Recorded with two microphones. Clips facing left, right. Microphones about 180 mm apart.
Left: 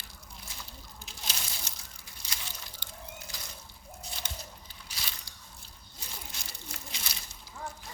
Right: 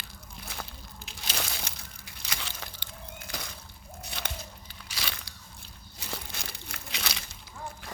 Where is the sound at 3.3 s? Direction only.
75° right (ahead or behind).